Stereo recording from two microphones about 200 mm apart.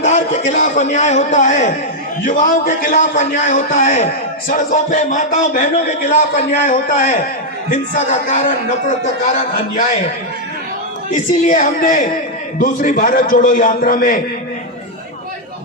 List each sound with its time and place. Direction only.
0.0 s a man's voice: 35° left (ahead or behind)
11.1 s a man's voice: 40° left (ahead or behind)